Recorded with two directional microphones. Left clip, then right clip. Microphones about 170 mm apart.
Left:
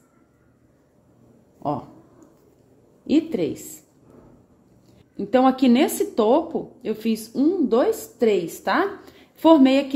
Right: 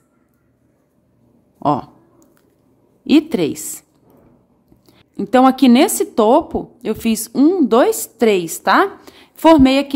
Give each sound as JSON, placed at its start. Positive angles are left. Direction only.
{"t": 1.6, "sound": "speech", "side_deg": -45}
{"t": 3.1, "sound": "a woman's voice", "side_deg": -40}
{"t": 4.9, "sound": "a woman's voice", "side_deg": -30}